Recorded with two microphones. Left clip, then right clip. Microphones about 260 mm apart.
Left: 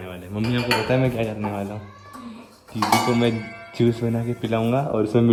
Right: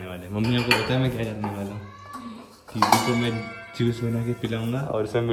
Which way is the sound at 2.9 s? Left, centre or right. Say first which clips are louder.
Left 3 dB; centre.